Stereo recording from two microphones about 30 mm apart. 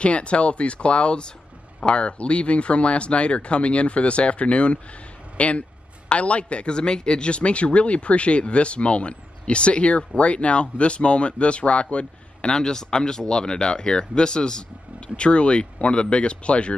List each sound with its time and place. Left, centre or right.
0.0 s a man's voice: left
12.4 s speech: left
15.1 s a man's voice: left